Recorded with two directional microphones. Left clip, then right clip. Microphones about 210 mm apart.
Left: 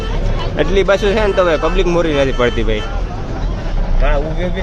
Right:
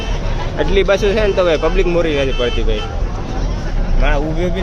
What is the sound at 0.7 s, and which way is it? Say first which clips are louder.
Speech: even; 5° left (ahead or behind).